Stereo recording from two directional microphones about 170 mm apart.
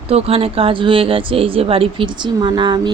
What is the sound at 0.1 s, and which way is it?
Speech, 35° right (ahead or behind).